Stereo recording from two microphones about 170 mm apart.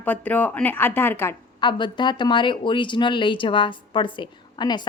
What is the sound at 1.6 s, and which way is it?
Speech, 25° left (ahead or behind).